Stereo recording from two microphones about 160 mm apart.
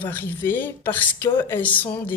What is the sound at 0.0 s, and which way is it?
A woman's voice, 10° left (ahead or behind).